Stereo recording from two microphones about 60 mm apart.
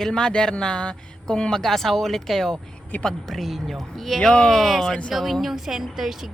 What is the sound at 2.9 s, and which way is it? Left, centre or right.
Speech, left.